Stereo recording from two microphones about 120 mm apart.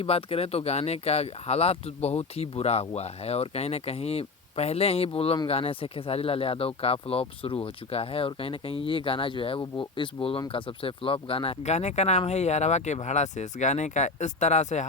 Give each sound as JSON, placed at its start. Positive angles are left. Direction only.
{"t": 0.0, "sound": "speech", "side_deg": 55}